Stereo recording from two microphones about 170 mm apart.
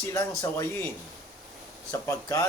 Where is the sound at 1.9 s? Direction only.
20° left (ahead or behind).